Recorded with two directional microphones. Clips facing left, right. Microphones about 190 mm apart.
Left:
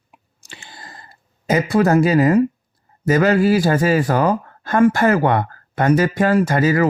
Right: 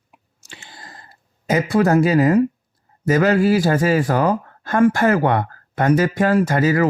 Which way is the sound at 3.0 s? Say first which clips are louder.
Left 1 dB; 35° left (ahead or behind).